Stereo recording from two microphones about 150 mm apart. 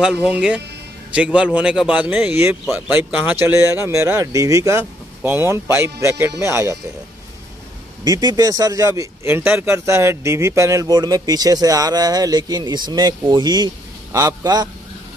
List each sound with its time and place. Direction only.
0.0 s speech: 5° right (ahead or behind)
8.0 s speech: 30° right (ahead or behind)